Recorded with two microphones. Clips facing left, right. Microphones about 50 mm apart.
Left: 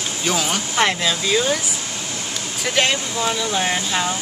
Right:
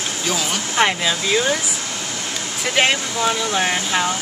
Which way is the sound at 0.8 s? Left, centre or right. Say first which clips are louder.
Right 1 dB; centre.